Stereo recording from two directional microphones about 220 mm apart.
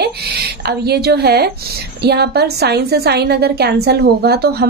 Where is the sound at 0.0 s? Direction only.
45° right (ahead or behind).